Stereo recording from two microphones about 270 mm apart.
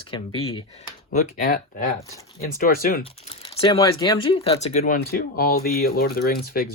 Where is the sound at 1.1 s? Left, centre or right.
Left.